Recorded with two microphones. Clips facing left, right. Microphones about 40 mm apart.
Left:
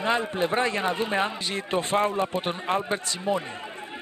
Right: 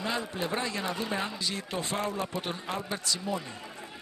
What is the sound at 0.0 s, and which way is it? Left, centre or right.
Speech, left.